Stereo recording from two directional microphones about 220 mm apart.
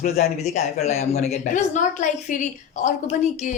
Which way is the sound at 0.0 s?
30° left (ahead or behind).